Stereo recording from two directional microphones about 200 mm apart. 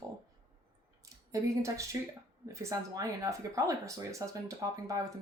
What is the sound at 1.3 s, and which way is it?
Speech, 15° right (ahead or behind).